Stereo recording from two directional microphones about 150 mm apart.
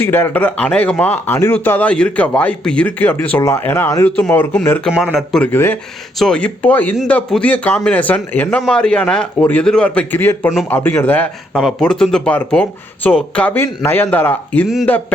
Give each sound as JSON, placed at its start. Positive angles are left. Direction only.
{"t": 0.0, "sound": "speech", "side_deg": 15}
{"t": 4.9, "sound": "speech", "side_deg": -5}